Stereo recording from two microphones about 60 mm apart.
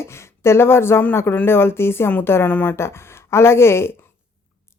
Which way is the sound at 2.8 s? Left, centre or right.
Left.